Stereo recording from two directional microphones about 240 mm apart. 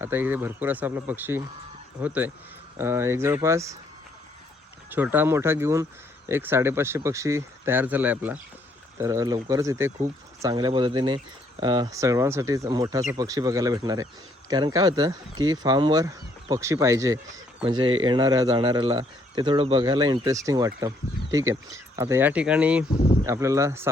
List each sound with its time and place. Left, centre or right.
0.0 s speech: centre
4.9 s speech: centre